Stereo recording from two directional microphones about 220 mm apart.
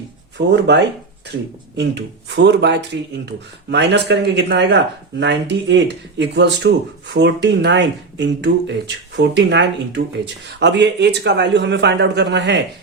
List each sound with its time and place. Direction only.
0.3 s speech: 50° right (ahead or behind)